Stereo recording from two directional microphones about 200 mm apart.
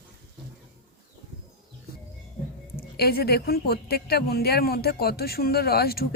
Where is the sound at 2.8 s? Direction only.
50° left (ahead or behind).